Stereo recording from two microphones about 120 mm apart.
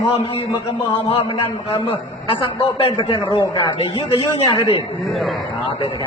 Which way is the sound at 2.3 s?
50° left (ahead or behind).